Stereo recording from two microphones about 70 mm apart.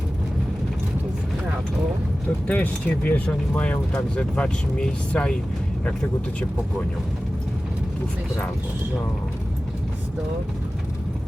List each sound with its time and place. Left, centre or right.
2.5 s speech: left